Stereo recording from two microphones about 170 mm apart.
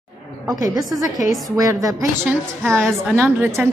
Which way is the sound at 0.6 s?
20° right (ahead or behind).